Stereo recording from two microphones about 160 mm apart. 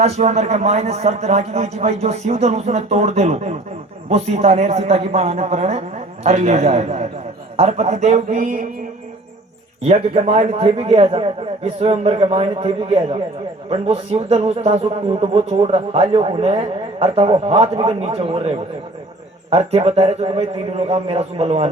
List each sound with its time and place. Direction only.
0.0 s a man's voice: 45° right (ahead or behind)
9.8 s a man's voice: 40° right (ahead or behind)